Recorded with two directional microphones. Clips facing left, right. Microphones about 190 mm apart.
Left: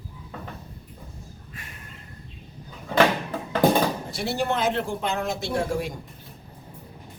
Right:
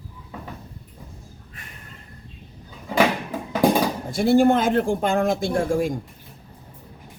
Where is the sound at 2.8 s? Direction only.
10° right (ahead or behind).